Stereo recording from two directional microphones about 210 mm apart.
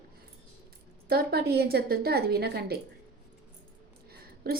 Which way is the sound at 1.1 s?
50° right (ahead or behind).